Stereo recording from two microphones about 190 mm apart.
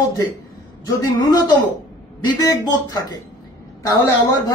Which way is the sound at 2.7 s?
20° left (ahead or behind).